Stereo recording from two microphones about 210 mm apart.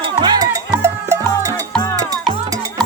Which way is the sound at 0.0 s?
20° right (ahead or behind).